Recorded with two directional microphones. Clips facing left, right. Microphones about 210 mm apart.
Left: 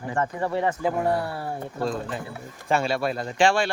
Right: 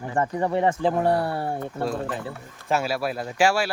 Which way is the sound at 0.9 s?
65° right (ahead or behind).